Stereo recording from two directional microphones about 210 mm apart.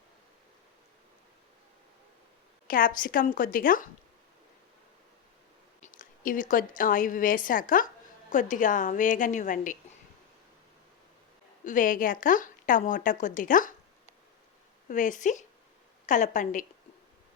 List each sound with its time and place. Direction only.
2.6 s speech: 40° left (ahead or behind)
5.8 s a woman's voice: 40° left (ahead or behind)
11.6 s speech: 40° left (ahead or behind)
14.8 s speech: 35° left (ahead or behind)